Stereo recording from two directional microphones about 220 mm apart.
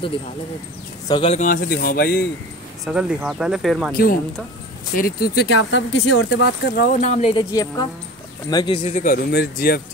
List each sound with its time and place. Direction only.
1.0 s speech: 25° left (ahead or behind); by 2.2 s 45° left (ahead or behind)
2.8 s speech: 5° right (ahead or behind)
3.9 s speech: 40° left (ahead or behind)
5.5 s speech: 65° left (ahead or behind); by 8.9 s 25° left (ahead or behind)
8.9 s speech: 40° left (ahead or behind)